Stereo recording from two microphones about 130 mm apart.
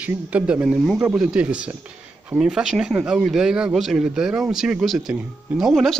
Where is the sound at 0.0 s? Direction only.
10° right (ahead or behind).